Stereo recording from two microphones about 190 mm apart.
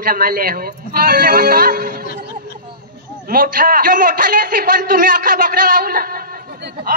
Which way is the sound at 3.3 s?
50° right (ahead or behind).